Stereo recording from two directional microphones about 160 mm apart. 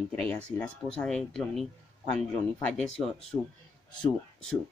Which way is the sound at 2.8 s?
5° left (ahead or behind).